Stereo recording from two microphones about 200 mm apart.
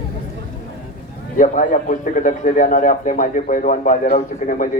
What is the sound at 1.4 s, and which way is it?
A man's voice, 40° left (ahead or behind).